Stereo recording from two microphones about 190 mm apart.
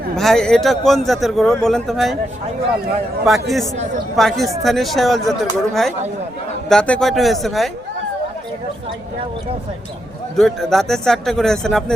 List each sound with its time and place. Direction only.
0.2 s speech: centre (ahead or behind)
3.2 s speech: centre (ahead or behind)
10.3 s speech: centre (ahead or behind)